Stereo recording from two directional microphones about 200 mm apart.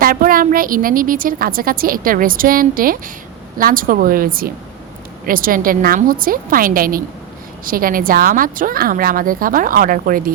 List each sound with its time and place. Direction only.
0.0 s a woman's voice: 45° right (ahead or behind)